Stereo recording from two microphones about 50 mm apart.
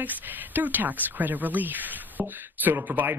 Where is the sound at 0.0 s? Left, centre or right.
Right.